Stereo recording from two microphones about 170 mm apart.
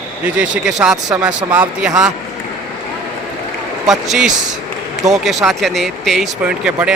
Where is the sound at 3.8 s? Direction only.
Centre (ahead or behind).